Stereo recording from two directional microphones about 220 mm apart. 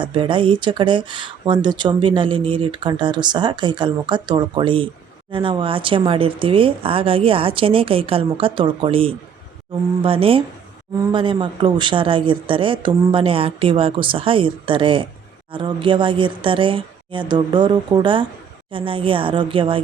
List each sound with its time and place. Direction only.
0.0 s speech: 20° right (ahead or behind)